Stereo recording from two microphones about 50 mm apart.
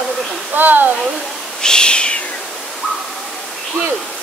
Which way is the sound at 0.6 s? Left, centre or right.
Right.